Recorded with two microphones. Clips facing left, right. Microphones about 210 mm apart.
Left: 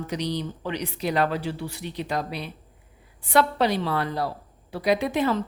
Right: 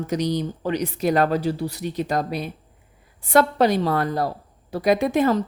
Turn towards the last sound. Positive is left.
turn(degrees=-45)  # may be behind; listen again after turning